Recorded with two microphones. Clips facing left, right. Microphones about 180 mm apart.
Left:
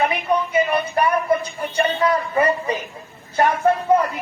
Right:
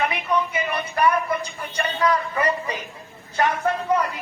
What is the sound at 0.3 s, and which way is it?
Speech, 30° left (ahead or behind).